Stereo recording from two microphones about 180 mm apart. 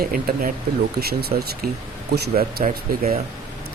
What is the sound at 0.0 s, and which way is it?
Speech, 55° right (ahead or behind).